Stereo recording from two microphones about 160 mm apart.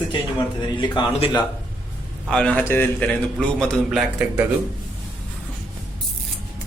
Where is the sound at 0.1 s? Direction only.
25° left (ahead or behind).